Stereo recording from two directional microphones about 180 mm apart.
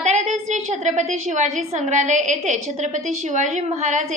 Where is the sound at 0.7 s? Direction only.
40° right (ahead or behind).